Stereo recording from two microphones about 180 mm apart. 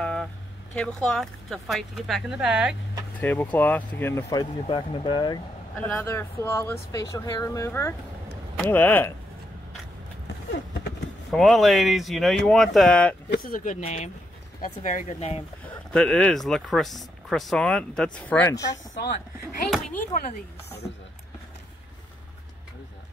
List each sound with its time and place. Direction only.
0.0 s a sound: 5° left (ahead or behind)
0.7 s speech: 5° left (ahead or behind)
3.2 s speech: 10° left (ahead or behind)
4.3 s speech: 25° left (ahead or behind)
5.8 s speech: 10° left (ahead or behind)
10.5 s a sound: 75° left (ahead or behind)
11.3 s speech: centre (ahead or behind)
13.4 s speech: 50° left (ahead or behind)
15.9 s speech: 5° left (ahead or behind)